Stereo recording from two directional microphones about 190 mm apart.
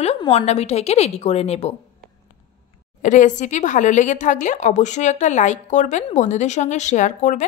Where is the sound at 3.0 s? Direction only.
40° left (ahead or behind).